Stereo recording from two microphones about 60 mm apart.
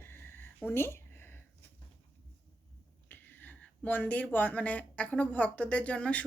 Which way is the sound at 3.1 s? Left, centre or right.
Left.